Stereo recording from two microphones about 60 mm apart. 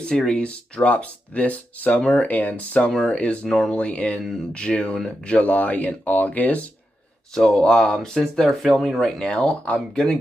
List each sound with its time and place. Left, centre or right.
0.3 s speech: centre
3.4 s speech: centre
3.7 s speech: left
4.2 s speech: centre
4.6 s speech: centre
7.3 s speech: centre
9.2 s speech: centre